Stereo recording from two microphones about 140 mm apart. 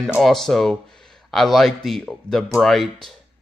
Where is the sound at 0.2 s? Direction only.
Centre (ahead or behind).